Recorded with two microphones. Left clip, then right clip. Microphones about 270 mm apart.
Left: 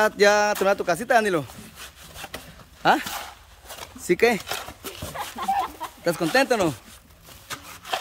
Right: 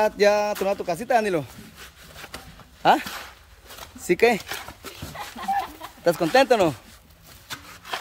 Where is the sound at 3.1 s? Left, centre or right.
Left.